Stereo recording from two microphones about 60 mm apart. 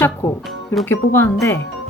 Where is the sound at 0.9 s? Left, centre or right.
Left.